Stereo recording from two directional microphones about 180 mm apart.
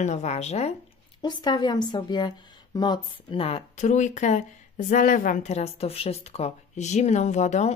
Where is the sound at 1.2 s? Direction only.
25° left (ahead or behind).